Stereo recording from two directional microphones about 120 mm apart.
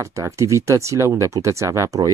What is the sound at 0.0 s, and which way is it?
Speech, 25° right (ahead or behind).